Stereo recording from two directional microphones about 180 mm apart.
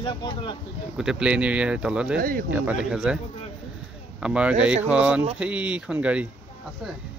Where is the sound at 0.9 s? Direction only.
5° right (ahead or behind).